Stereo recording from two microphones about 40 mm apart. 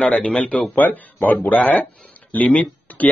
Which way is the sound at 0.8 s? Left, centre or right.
Left.